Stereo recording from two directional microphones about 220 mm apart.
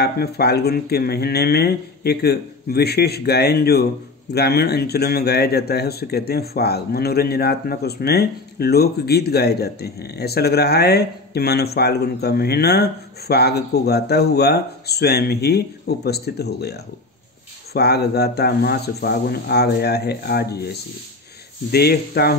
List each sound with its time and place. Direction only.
0.0 s speech: 45° left (ahead or behind)